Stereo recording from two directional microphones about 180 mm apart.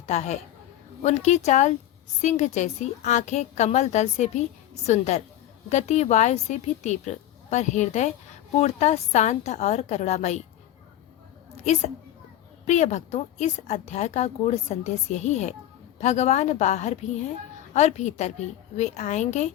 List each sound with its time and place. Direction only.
0.0 s a woman's voice: 40° left (ahead or behind)
11.6 s a woman's voice: 40° left (ahead or behind)